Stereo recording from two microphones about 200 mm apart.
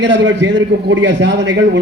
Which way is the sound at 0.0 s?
60° right (ahead or behind).